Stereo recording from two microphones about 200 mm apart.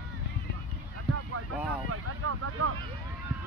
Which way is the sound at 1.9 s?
90° right.